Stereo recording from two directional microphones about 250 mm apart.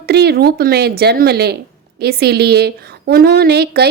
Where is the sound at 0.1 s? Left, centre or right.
Right.